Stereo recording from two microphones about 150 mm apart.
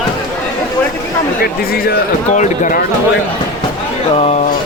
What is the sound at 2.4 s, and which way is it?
Speech, 65° left (ahead or behind).